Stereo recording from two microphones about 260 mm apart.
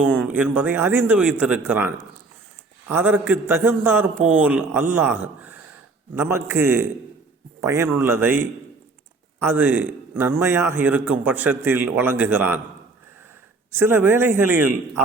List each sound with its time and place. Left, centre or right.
0.0 s a man's voice: centre
2.9 s a man's voice: centre
13.7 s a man's voice: centre